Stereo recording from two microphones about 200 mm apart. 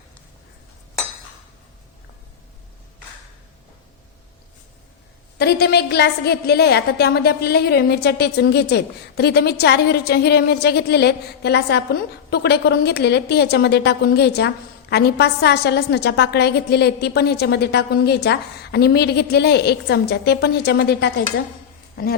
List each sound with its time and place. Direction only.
5.4 s a woman's voice: 55° left (ahead or behind)